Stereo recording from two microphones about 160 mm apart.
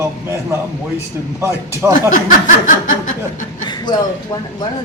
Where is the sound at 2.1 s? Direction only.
55° left (ahead or behind).